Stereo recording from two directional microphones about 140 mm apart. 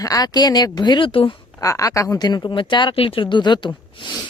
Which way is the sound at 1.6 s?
25° left (ahead or behind).